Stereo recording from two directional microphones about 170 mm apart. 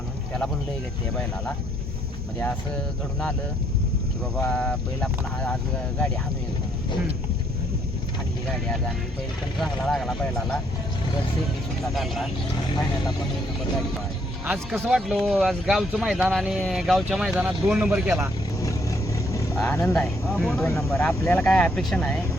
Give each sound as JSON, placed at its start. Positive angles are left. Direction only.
{"t": 4.4, "sound": "speech", "side_deg": 5}
{"t": 8.4, "sound": "speech", "side_deg": 0}
{"t": 11.9, "sound": "speech", "side_deg": 0}
{"t": 14.4, "sound": "speech", "side_deg": -10}
{"t": 18.6, "sound": "vehicle", "side_deg": 20}
{"t": 19.5, "sound": "speech", "side_deg": 10}
{"t": 20.3, "sound": "speech", "side_deg": 0}
{"t": 20.7, "sound": "speech", "side_deg": 10}